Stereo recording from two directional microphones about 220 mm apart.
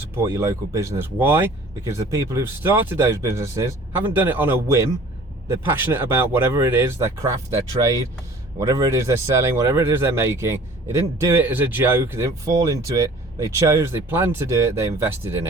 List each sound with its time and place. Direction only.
0.2 s speech: 15° right (ahead or behind)